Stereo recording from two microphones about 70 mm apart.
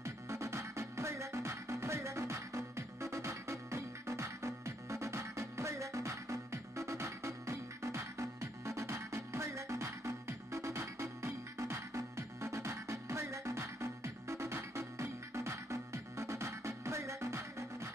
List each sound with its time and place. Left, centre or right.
0.0 s music: right